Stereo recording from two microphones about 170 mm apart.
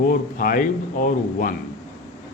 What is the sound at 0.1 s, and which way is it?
Speech, 55° left (ahead or behind).